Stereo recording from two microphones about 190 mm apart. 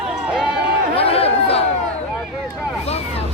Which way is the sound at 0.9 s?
30° left (ahead or behind).